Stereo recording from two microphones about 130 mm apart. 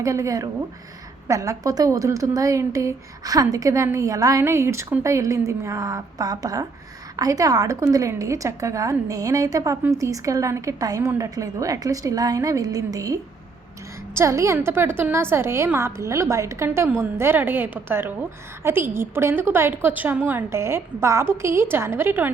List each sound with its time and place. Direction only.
0.0 s a woman's voice: 25° right (ahead or behind)